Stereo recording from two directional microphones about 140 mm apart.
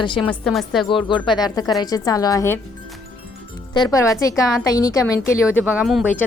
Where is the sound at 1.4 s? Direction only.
30° left (ahead or behind).